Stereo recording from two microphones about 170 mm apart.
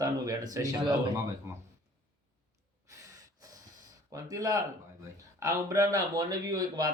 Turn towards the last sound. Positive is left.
turn(degrees=-25)  # may be behind; listen again after turning